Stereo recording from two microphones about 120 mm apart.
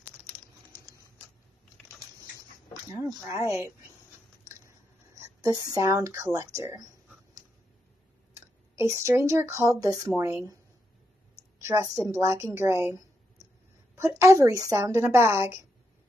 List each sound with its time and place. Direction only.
2.9 s a woman's voice: 25° right (ahead or behind)
4.5 s a sound: 25° right (ahead or behind)
8.4 s a woman's voice: 25° right (ahead or behind)
13.9 s a woman's voice: 25° right (ahead or behind)